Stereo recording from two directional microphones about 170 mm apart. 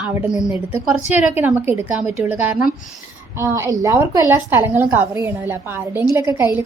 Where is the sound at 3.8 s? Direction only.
20° right (ahead or behind).